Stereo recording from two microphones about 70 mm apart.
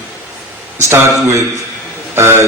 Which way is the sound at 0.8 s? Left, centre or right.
Right.